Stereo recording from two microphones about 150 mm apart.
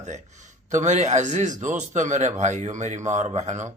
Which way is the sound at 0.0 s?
50° right (ahead or behind).